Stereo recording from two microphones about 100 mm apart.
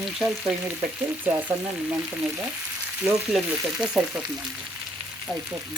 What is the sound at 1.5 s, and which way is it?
Frying, 20° right (ahead or behind).